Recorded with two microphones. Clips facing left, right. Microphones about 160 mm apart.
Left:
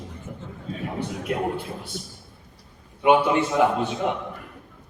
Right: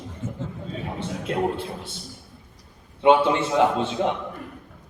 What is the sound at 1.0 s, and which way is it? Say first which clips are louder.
Speech: right 2 dB; 25° right (ahead or behind).